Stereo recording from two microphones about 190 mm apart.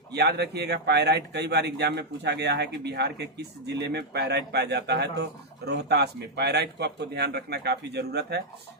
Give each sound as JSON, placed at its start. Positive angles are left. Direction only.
{"t": 0.1, "sound": "speech", "side_deg": -60}